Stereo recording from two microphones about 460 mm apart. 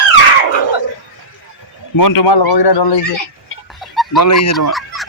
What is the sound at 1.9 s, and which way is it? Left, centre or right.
A man's voice, left.